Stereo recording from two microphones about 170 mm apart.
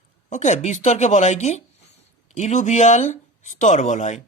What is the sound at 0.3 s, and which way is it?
Speech, 45° left (ahead or behind).